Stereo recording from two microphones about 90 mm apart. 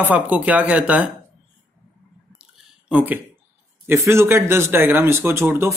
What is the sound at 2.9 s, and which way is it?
Speech, 20° right (ahead or behind).